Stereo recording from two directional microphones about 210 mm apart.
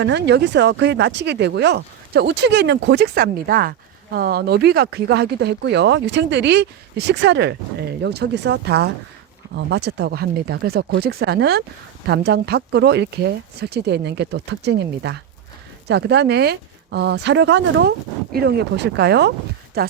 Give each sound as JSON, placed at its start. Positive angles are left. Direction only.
{"t": 0.0, "sound": "speech", "side_deg": -55}